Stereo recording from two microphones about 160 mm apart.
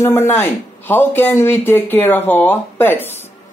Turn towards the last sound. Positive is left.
turn(degrees=10)  # may be behind; listen again after turning